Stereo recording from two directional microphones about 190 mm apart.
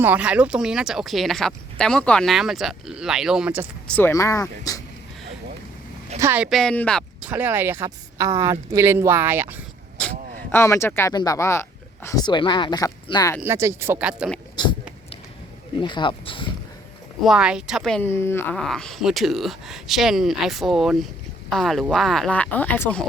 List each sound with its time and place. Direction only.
0.0 s speech: 5° right (ahead or behind)
3.8 s speech: 10° left (ahead or behind)
6.1 s speech: 10° right (ahead or behind); by 7.3 s 5° left (ahead or behind)
7.3 s speech: 10° right (ahead or behind)
10.5 s speech: 15° left (ahead or behind)
13.4 s speech: 15° right (ahead or behind)
14.5 s a sound: 25° left (ahead or behind)
15.8 s speech: 25° left (ahead or behind)
17.2 s speech: 5° right (ahead or behind)
18.1 s speech: 15° left (ahead or behind)